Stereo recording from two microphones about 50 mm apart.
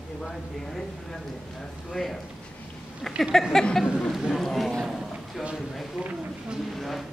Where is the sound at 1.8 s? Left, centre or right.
Centre.